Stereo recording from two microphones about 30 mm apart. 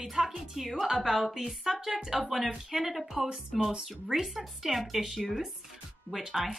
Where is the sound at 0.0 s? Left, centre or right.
Centre.